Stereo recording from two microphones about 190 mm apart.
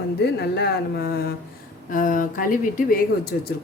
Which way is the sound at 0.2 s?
60° left (ahead or behind).